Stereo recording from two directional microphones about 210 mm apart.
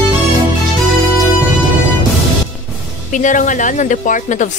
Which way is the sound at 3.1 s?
35° left (ahead or behind).